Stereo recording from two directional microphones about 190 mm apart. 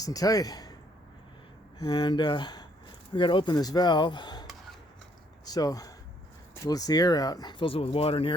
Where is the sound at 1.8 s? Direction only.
20° left (ahead or behind).